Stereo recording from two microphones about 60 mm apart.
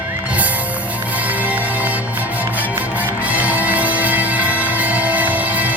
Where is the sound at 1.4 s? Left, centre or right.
Right.